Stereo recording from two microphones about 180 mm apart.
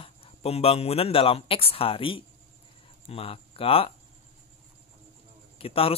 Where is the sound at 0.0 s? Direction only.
30° left (ahead or behind).